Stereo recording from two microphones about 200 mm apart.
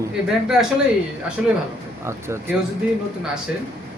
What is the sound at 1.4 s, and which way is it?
A man's voice, 5° right (ahead or behind).